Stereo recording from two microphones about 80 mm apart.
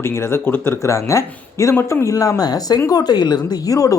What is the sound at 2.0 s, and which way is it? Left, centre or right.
Speech, left.